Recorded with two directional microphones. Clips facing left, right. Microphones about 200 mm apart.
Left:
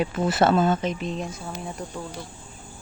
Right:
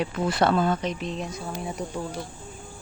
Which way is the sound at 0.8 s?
Centre (ahead or behind).